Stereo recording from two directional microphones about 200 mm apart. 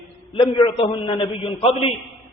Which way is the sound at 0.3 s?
25° left (ahead or behind).